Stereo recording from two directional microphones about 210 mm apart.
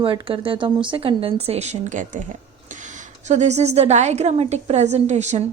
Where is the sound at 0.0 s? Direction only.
25° right (ahead or behind).